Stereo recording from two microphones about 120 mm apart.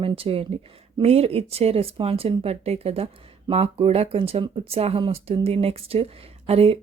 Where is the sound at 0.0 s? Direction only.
50° right (ahead or behind).